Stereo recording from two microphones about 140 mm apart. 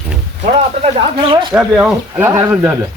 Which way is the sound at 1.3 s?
35° right (ahead or behind).